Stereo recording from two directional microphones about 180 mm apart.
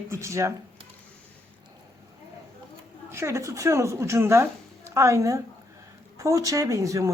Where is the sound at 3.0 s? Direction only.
15° right (ahead or behind).